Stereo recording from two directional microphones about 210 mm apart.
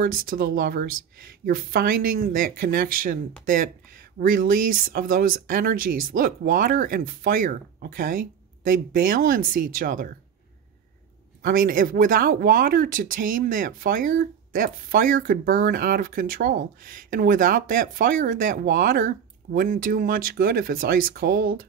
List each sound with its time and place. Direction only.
0.0 s speech: 45° right (ahead or behind)
11.4 s speech: 45° right (ahead or behind)